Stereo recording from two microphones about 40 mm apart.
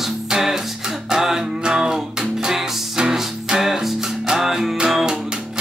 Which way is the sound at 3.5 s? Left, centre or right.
Centre.